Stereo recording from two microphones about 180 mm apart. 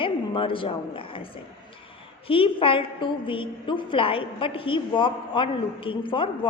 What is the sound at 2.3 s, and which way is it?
A woman's voice, 30° left (ahead or behind).